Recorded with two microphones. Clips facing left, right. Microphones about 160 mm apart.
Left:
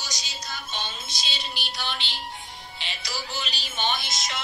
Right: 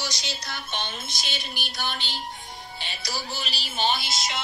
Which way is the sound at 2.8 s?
40° right (ahead or behind).